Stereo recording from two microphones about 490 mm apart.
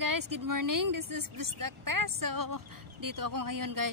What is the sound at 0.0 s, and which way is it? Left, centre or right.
A woman's voice, right.